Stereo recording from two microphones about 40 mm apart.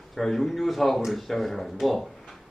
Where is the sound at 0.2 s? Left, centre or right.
Centre.